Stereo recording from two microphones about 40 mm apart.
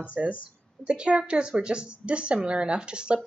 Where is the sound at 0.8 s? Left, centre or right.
Right.